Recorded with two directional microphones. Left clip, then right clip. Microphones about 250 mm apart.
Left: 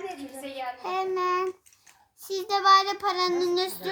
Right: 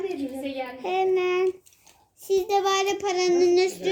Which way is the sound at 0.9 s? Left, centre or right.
Left.